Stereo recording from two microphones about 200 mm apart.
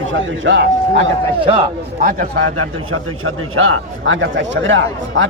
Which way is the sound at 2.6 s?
90° right.